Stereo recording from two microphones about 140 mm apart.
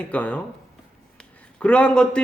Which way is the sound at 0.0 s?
10° left (ahead or behind).